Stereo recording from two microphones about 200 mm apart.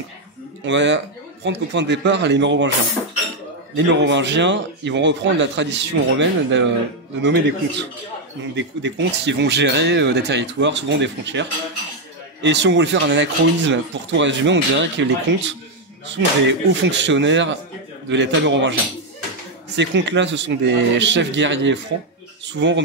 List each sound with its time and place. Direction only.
0.7 s speech: 65° right (ahead or behind)
3.7 s speech: 60° right (ahead or behind)